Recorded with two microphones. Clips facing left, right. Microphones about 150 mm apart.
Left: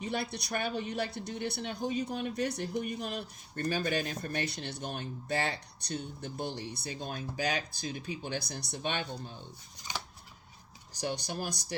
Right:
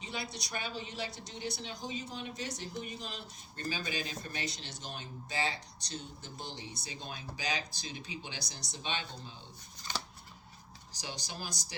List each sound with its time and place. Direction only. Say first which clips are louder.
0.0 s speech: left 6 dB; 60° left (ahead or behind)
11.0 s speech: left 8 dB; 55° left (ahead or behind)